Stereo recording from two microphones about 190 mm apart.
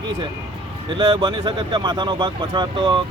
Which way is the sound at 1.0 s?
25° right (ahead or behind).